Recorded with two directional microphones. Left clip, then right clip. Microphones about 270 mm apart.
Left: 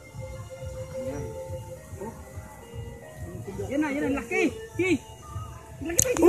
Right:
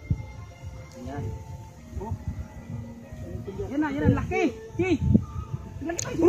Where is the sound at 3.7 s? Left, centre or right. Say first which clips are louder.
Right 1 dB; right.